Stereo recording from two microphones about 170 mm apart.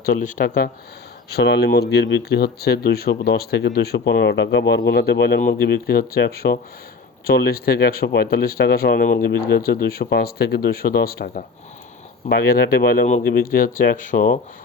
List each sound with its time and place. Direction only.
0.0 s speech: 55° left (ahead or behind)
1.3 s speech: 80° left
4.9 s speech: 75° left (ahead or behind)
5.4 s speech: 65° left (ahead or behind)
13.1 s speech: 50° left (ahead or behind)